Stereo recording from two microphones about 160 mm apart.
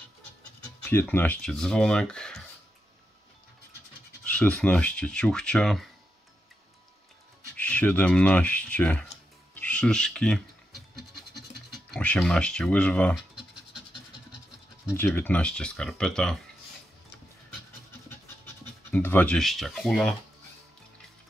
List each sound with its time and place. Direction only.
0.8 s speech: 10° left (ahead or behind)
4.2 s speech: 5° left (ahead or behind)
7.5 s speech: 10° left (ahead or behind)
9.6 s music: 5° left (ahead or behind)
11.9 s speech: 10° left (ahead or behind)
14.9 s speech: 15° left (ahead or behind)
18.4 s speech: 10° left (ahead or behind)